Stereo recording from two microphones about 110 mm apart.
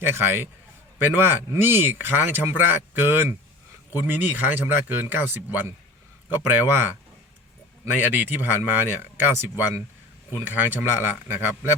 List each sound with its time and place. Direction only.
0.0 s a man's voice: 20° right (ahead or behind)